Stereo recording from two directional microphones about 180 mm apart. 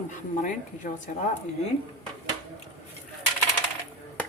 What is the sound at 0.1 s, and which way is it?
Cutlery, 45° left (ahead or behind).